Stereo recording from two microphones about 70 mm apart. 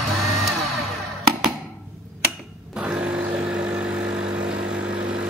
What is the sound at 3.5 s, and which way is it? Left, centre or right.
Vehicle, centre.